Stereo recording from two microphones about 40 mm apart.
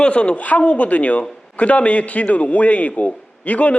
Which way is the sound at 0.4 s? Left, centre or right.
Left.